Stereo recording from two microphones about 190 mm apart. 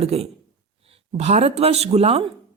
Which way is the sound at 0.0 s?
30° right (ahead or behind).